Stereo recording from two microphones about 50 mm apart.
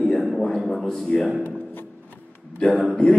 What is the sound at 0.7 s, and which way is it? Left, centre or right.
Speech, centre.